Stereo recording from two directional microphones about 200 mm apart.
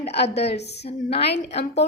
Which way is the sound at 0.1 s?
55° left (ahead or behind).